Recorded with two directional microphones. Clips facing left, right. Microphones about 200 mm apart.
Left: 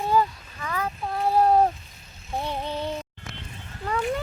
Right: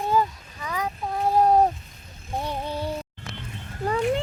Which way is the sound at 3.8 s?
45° right (ahead or behind).